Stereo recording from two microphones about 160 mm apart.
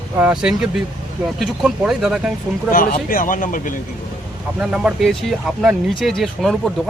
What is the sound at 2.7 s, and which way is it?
Speech, 60° left (ahead or behind).